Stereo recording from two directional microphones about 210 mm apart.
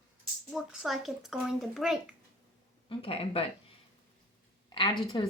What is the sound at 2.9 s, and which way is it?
Speech, 25° left (ahead or behind).